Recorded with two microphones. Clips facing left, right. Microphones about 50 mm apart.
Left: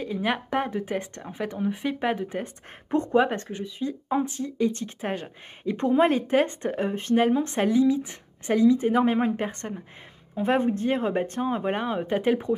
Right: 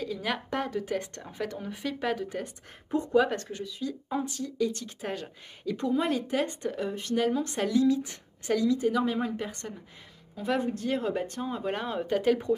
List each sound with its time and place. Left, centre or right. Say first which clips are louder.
0.0 s speech: left 5 dB; left